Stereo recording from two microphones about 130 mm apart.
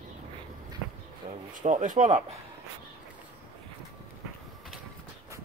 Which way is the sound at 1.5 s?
80° right.